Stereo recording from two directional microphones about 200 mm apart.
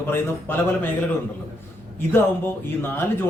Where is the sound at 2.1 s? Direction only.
10° left (ahead or behind).